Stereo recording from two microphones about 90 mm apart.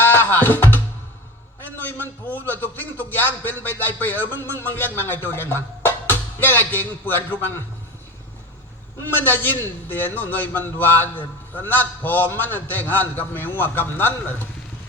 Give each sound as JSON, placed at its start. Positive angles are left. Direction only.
{"t": 0.0, "sound": "music", "side_deg": 20}
{"t": 1.6, "sound": "a sound", "side_deg": 20}
{"t": 2.5, "sound": "a man's voice", "side_deg": 20}
{"t": 9.0, "sound": "a man's voice", "side_deg": 20}